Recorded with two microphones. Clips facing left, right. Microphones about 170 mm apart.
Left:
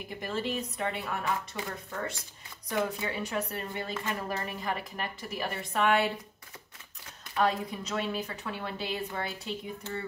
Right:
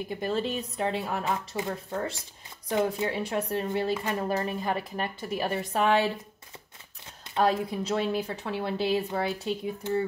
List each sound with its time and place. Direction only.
0.2 s a woman's voice: 30° right (ahead or behind)
7.3 s a woman's voice: 30° right (ahead or behind)